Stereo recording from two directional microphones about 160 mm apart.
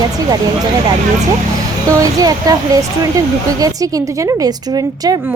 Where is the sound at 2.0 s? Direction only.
20° right (ahead or behind).